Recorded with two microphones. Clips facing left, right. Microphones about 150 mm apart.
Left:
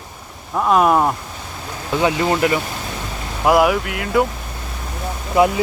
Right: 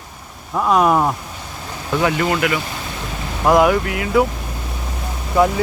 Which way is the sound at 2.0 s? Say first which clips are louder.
Left 1 dB; 20° left (ahead or behind).